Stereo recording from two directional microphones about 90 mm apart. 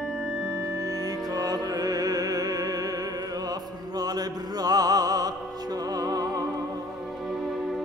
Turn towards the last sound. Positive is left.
turn(degrees=-45)  # may be behind; listen again after turning